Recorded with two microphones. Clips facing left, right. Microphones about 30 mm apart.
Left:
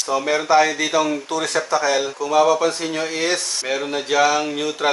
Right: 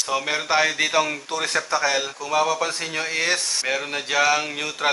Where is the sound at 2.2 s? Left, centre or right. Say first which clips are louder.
Left 6 dB; centre.